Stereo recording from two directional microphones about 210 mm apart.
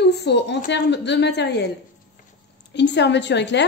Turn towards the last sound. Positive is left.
turn(degrees=55)  # may be behind; listen again after turning